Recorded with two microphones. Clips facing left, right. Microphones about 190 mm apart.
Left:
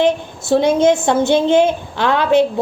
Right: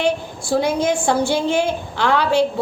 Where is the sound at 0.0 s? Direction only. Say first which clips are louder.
Left 4 dB; 25° left (ahead or behind).